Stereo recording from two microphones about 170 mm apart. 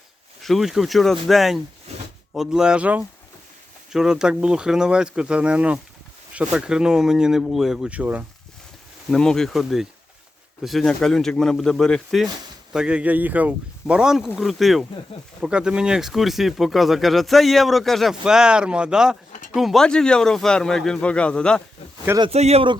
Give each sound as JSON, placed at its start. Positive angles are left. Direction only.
{"t": 0.4, "sound": "speech", "side_deg": 0}
{"t": 9.0, "sound": "speech", "side_deg": 5}
{"t": 19.3, "sound": "a sound", "side_deg": 45}
{"t": 19.5, "sound": "speech", "side_deg": 0}
{"t": 22.2, "sound": "speech", "side_deg": -40}